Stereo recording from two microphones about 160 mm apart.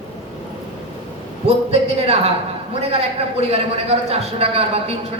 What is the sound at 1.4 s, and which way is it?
A man's voice, 40° right (ahead or behind).